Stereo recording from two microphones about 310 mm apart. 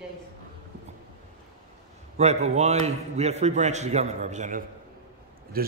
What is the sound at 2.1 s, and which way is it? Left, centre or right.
A man's voice, right.